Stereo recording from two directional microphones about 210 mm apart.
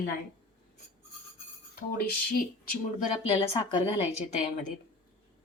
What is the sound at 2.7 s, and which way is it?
Speech, 40° left (ahead or behind).